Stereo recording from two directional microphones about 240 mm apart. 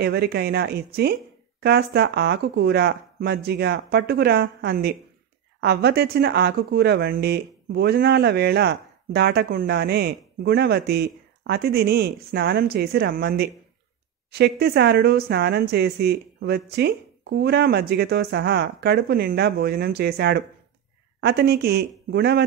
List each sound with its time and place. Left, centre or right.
0.0 s speech: right